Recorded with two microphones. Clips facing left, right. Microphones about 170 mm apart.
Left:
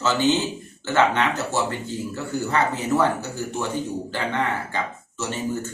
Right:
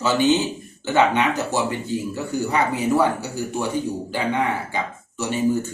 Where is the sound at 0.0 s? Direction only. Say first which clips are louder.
Right 2 dB; 15° right (ahead or behind).